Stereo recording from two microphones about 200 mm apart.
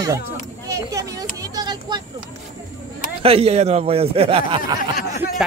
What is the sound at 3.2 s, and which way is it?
A man's voice, 30° right (ahead or behind).